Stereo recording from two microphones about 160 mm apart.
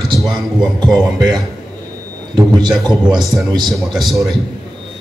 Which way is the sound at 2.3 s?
25° right (ahead or behind).